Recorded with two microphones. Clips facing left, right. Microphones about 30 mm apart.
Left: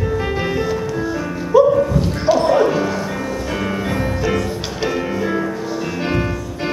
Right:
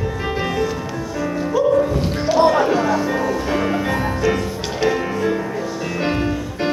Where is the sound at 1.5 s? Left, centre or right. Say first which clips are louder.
Left 7 dB; centre.